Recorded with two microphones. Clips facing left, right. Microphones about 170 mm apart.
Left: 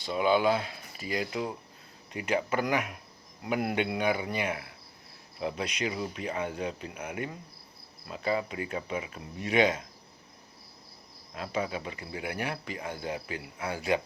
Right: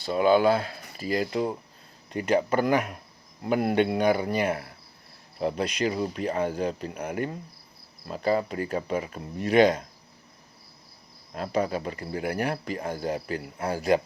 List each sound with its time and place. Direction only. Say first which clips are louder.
0.0 s speech: right 5 dB; 45° right (ahead or behind)
11.3 s speech: right 6 dB; 40° right (ahead or behind)